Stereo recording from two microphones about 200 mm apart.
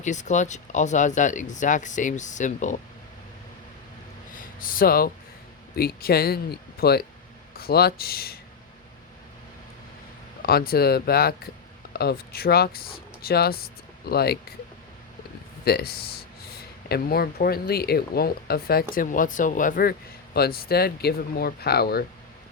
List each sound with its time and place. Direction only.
0.0 s speech: 35° left (ahead or behind)
4.4 s speech: 45° left (ahead or behind)
10.4 s speech: 50° left (ahead or behind)
15.6 s speech: 50° left (ahead or behind)